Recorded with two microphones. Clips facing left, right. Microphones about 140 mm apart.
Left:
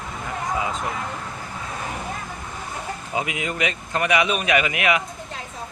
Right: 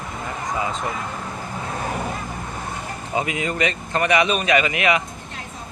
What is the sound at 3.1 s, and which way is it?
Speech, 5° left (ahead or behind).